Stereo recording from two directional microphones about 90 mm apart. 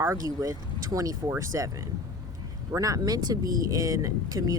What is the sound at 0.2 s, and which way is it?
Speech, 40° right (ahead or behind).